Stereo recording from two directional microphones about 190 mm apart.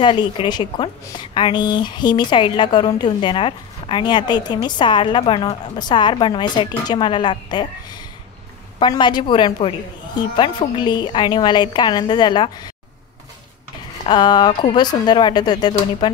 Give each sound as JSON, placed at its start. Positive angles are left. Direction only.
{"t": 0.0, "sound": "a woman's voice", "side_deg": 25}
{"t": 14.0, "sound": "a woman's voice", "side_deg": 20}